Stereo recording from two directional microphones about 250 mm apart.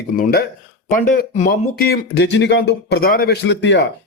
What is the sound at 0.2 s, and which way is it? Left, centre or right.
Speech, left.